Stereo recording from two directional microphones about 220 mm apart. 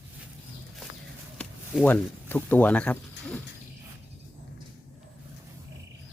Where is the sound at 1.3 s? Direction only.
5° left (ahead or behind).